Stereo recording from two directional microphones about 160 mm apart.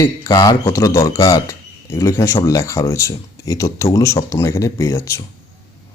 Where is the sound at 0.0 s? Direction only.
25° left (ahead or behind).